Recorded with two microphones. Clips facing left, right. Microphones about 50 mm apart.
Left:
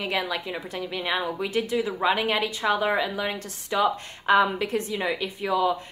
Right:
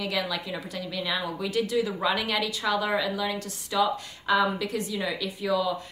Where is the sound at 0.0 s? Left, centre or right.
Left.